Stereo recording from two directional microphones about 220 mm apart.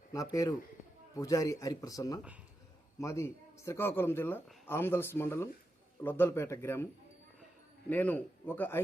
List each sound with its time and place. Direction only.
0.1 s a man's voice: 15° left (ahead or behind)
7.9 s a man's voice: 5° left (ahead or behind)